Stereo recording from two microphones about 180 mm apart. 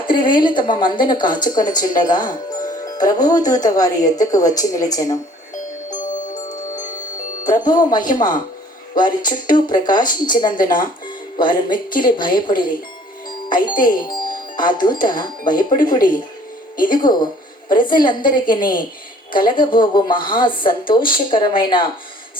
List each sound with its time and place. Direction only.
0.0 s speech: 25° left (ahead or behind)
1.2 s speech: 50° left (ahead or behind)
1.5 s speech: 20° left (ahead or behind)
5.9 s chime: 45° left (ahead or behind)
7.5 s speech: 25° left (ahead or behind)
16.9 s speech: 25° left (ahead or behind)
18.6 s speech: 50° left (ahead or behind)
19.3 s speech: 25° left (ahead or behind)